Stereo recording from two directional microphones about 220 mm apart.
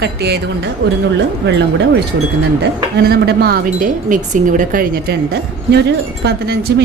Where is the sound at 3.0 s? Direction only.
45° right (ahead or behind).